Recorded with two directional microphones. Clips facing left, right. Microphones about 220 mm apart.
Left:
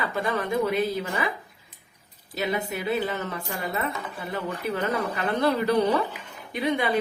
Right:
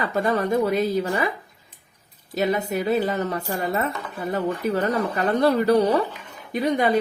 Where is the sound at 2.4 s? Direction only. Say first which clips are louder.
Right 5 dB; 45° right (ahead or behind).